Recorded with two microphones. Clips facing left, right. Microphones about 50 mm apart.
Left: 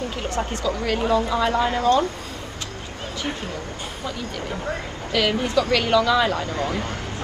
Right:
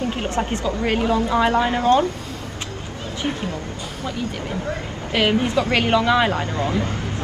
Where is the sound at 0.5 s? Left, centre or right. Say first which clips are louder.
Right 2 dB; right.